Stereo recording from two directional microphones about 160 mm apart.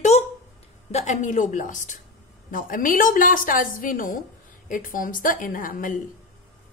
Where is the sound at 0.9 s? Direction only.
50° left (ahead or behind).